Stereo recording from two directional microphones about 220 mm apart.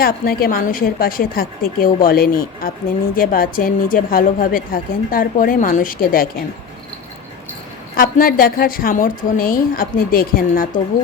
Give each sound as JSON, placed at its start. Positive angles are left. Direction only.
{"t": 0.0, "sound": "a woman's voice", "side_deg": 45}
{"t": 7.9, "sound": "a woman's voice", "side_deg": 40}